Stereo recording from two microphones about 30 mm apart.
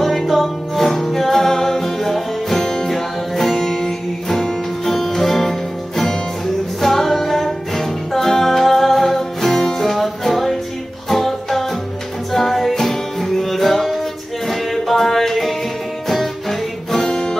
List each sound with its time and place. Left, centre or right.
0.3 s music: centre
3.5 s music: centre